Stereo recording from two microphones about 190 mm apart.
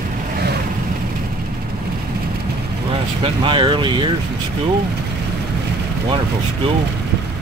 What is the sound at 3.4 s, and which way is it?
Speech, 25° right (ahead or behind).